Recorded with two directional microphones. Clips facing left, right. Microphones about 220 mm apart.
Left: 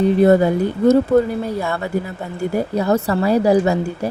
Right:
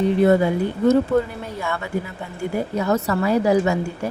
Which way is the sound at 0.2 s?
40° left (ahead or behind).